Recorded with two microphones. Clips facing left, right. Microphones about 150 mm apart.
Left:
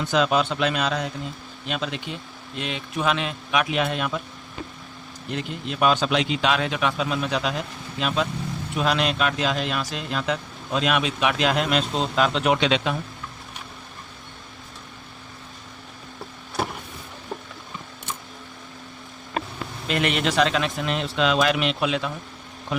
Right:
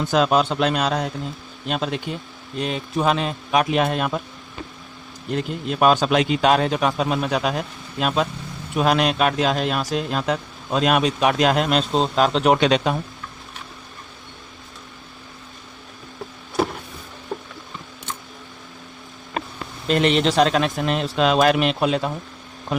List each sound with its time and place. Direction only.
0.0 s a man's voice: 45° right (ahead or behind)
5.3 s a man's voice: 45° right (ahead or behind)
19.9 s speech: 30° right (ahead or behind)
20.4 s a man's voice: 45° right (ahead or behind)